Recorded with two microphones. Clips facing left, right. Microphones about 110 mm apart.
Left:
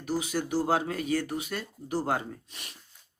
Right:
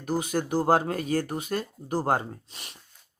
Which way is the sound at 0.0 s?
50° right (ahead or behind).